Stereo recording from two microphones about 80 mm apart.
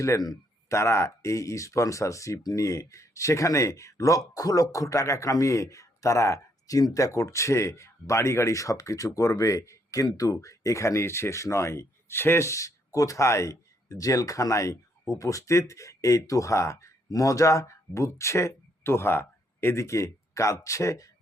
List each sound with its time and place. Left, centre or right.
0.7 s speech: left